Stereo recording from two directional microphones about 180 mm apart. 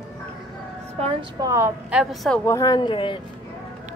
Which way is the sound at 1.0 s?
30° right (ahead or behind).